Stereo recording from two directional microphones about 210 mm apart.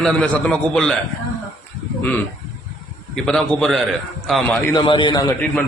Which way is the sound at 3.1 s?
Centre (ahead or behind).